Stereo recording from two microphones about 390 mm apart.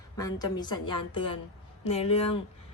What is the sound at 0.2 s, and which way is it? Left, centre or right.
A woman's voice, centre.